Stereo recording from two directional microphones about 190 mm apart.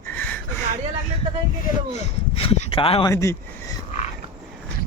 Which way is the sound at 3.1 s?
15° left (ahead or behind).